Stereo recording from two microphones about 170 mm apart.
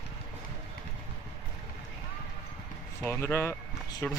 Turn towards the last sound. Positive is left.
turn(degrees=10)  # may be behind; listen again after turning